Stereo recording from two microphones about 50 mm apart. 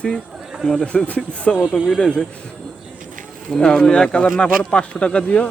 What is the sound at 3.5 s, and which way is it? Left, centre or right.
Speech, centre.